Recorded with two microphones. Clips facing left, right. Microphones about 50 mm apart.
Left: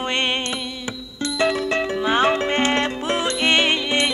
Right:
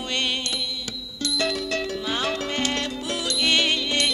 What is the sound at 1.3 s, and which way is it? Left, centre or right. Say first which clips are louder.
Music: left 6 dB; left.